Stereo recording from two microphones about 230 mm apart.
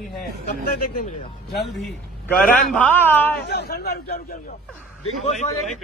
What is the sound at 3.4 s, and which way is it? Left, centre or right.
Speech, left.